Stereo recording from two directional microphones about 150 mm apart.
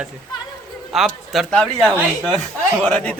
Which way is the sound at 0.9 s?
Centre (ahead or behind).